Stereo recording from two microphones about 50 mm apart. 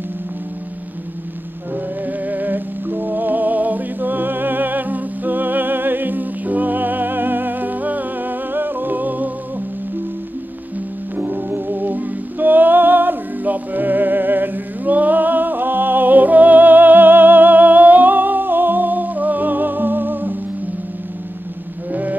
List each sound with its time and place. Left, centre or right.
2.0 s music: right
11.1 s music: right